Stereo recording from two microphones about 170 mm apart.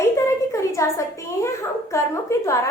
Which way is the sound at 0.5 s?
15° left (ahead or behind).